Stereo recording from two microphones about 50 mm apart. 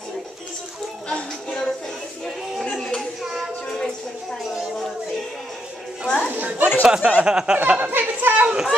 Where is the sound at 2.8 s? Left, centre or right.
Centre.